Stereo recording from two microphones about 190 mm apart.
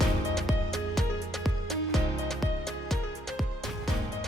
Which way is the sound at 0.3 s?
Centre (ahead or behind).